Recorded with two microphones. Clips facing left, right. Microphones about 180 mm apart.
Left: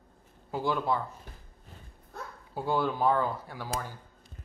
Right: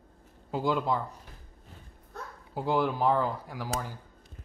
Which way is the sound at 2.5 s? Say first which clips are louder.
Right 1 dB; 15° right (ahead or behind).